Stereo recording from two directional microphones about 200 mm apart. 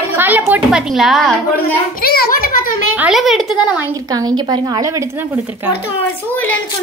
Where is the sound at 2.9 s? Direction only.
5° right (ahead or behind).